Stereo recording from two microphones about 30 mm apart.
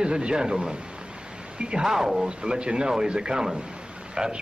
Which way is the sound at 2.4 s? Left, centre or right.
Right.